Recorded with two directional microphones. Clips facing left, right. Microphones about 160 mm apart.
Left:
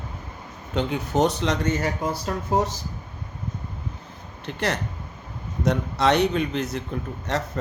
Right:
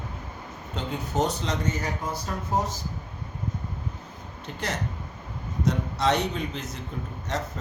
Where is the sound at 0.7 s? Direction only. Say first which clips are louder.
Left 6 dB; 70° left (ahead or behind).